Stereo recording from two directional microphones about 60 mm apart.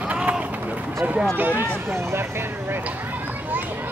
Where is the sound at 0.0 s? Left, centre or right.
Right.